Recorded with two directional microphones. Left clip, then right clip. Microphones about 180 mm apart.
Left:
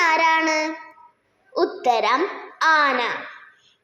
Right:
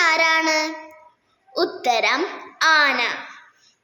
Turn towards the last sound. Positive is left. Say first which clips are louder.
# right 1 dB
turn(degrees=5)  # may be behind; listen again after turning